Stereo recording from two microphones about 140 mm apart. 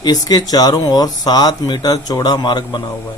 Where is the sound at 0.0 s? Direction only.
30° left (ahead or behind).